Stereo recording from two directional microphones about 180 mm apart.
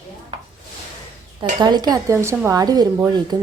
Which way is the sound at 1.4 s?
25° right (ahead or behind).